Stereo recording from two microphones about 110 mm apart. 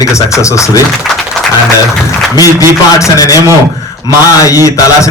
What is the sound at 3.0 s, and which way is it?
Speech, 35° left (ahead or behind).